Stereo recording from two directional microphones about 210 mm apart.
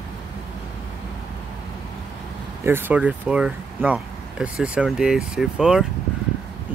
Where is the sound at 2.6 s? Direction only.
10° right (ahead or behind).